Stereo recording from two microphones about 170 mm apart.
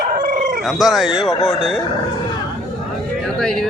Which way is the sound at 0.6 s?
Centre (ahead or behind).